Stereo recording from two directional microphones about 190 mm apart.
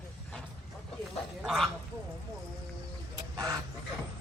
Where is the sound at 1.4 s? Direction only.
Centre (ahead or behind).